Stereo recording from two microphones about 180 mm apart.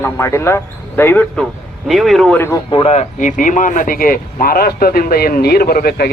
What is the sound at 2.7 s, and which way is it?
Speech, 30° left (ahead or behind).